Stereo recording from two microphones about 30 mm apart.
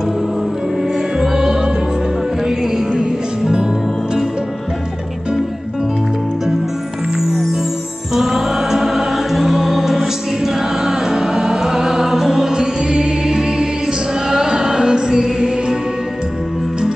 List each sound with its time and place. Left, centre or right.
1.2 s music: centre
7.2 s music: centre
12.5 s music: right